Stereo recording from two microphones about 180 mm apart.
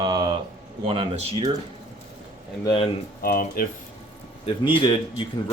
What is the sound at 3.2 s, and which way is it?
Speech, 55° left (ahead or behind).